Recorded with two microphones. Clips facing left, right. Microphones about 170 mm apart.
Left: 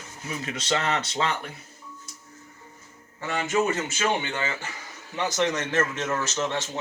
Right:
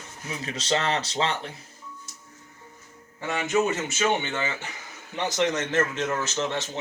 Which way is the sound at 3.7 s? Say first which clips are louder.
Right 1 dB; 20° right (ahead or behind).